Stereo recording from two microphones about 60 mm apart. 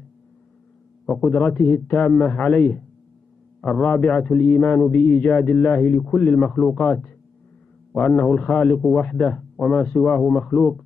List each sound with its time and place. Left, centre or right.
1.0 s a man's voice: centre
8.3 s a man's voice: centre